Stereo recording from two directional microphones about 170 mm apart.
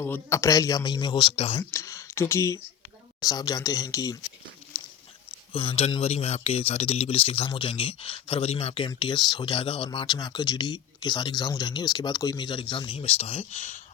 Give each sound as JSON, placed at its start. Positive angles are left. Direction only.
{"t": 0.0, "sound": "speech", "side_deg": 15}
{"t": 1.7, "sound": "speech", "side_deg": 20}
{"t": 5.5, "sound": "speech", "side_deg": 35}